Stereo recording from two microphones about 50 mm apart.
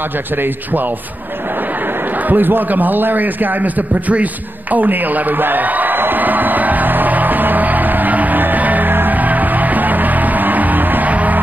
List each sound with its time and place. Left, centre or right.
2.2 s a man's voice: right
4.7 s music: right